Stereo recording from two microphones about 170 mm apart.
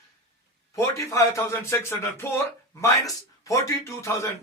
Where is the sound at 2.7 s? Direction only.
20° left (ahead or behind).